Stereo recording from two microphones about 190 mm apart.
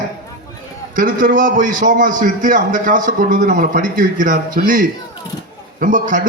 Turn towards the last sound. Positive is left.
turn(degrees=-45)  # may be behind; listen again after turning